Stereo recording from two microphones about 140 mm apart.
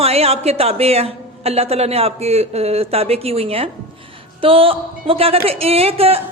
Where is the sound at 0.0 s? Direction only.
45° right (ahead or behind).